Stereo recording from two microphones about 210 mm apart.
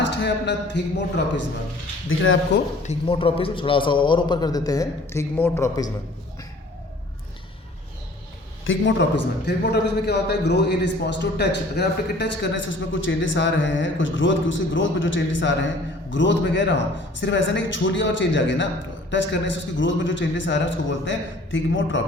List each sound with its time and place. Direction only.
0.0 s a man's voice: 55° left (ahead or behind)
2.0 s speech: 65° left (ahead or behind)
2.8 s a man's voice: 25° left (ahead or behind)
8.6 s a man's voice: 65° left (ahead or behind)